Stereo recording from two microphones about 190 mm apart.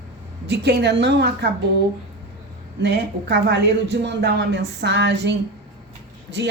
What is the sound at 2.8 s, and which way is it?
Speech, 65° right (ahead or behind).